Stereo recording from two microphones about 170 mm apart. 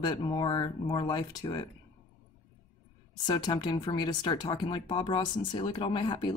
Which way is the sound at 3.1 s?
25° left (ahead or behind).